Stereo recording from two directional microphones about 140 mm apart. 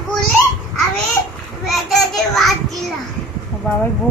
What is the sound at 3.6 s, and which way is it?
Speech, 10° left (ahead or behind).